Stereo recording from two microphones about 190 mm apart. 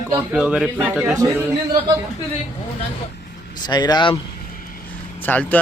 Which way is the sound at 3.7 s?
20° left (ahead or behind).